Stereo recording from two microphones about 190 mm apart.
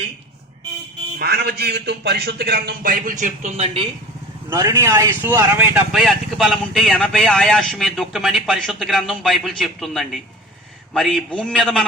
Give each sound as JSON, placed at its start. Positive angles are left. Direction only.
{"t": 1.2, "sound": "a man's voice", "side_deg": -55}
{"t": 4.4, "sound": "speech", "side_deg": -15}